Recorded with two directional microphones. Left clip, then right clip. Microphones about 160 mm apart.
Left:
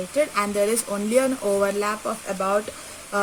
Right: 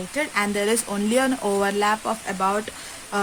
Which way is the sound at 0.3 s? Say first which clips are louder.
Even; 50° right (ahead or behind).